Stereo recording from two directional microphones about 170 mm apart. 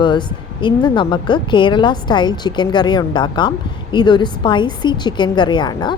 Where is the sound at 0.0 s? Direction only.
25° left (ahead or behind).